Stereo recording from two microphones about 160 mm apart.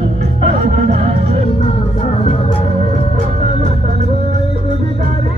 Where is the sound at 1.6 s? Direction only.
40° left (ahead or behind).